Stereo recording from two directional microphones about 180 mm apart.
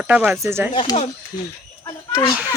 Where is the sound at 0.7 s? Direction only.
30° left (ahead or behind).